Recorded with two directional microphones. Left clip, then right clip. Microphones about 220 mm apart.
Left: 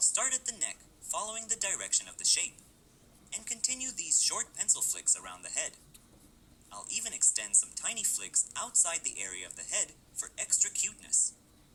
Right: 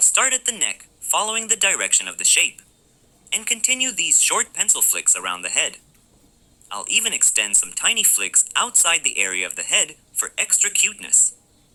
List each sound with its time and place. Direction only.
0.1 s a woman's voice: 25° right (ahead or behind)
6.8 s speech: 25° right (ahead or behind)